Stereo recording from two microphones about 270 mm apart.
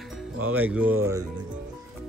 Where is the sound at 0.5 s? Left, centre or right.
Centre.